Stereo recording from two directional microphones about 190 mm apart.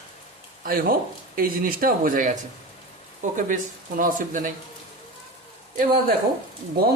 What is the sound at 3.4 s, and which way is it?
Speech, 45° right (ahead or behind).